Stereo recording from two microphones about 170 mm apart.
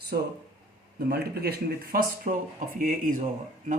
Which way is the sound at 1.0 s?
70° right (ahead or behind).